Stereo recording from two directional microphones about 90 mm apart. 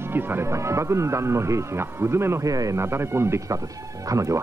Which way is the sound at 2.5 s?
35° right (ahead or behind).